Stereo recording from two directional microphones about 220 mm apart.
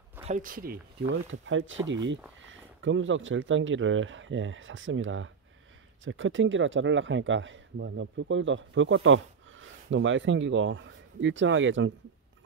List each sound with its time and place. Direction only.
0.2 s speech: 35° right (ahead or behind)
1.3 s speech: 60° right (ahead or behind)